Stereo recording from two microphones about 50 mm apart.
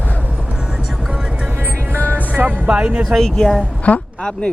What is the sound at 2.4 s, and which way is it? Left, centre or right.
Speech, right.